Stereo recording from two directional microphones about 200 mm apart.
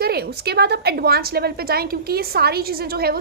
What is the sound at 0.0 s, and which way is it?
A woman's voice, 50° right (ahead or behind).